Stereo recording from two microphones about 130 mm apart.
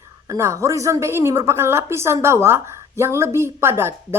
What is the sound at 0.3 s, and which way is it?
A woman's voice, 20° right (ahead or behind).